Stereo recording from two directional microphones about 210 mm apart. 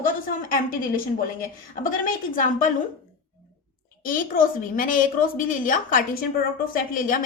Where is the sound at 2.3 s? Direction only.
40° left (ahead or behind).